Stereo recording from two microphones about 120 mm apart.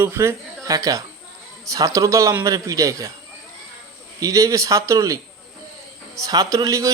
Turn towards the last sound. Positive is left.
turn(degrees=-30)  # may be behind; listen again after turning